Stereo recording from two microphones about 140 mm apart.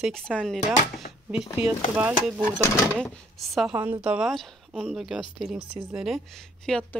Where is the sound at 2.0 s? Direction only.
10° right (ahead or behind).